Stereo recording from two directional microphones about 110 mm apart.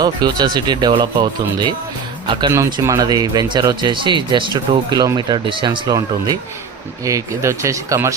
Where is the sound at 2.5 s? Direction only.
30° right (ahead or behind); by 5.7 s 45° right (ahead or behind).